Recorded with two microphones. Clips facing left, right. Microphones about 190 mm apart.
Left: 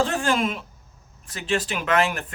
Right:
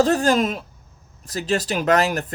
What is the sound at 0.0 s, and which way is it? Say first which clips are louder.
Speech: right 5 dB; 40° right (ahead or behind).